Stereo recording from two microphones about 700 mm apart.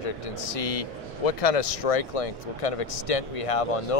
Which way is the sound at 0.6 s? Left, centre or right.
Left.